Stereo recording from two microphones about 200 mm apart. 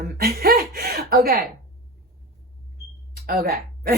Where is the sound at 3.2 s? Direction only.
50° right (ahead or behind).